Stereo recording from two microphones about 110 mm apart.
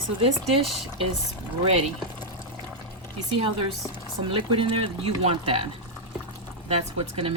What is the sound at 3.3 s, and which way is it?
Speech, 50° right (ahead or behind).